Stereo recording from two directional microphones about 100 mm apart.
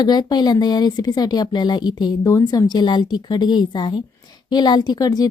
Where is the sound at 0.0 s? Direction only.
45° left (ahead or behind).